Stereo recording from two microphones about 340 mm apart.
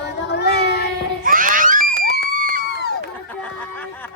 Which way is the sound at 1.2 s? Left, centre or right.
Right.